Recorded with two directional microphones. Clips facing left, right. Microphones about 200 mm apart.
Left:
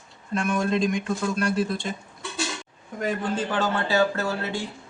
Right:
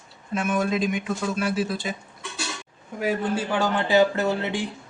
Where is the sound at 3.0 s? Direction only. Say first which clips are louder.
Right 2 dB; 10° right (ahead or behind).